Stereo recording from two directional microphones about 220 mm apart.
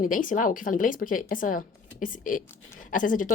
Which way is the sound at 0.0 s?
35° left (ahead or behind).